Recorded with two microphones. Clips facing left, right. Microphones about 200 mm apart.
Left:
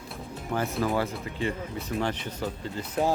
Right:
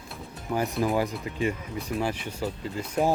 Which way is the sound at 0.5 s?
15° right (ahead or behind).